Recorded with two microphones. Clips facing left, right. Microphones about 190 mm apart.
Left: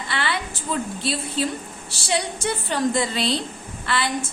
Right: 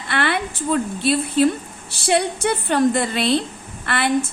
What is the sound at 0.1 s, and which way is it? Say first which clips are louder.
A woman's voice: right 6 dB; 55° right (ahead or behind).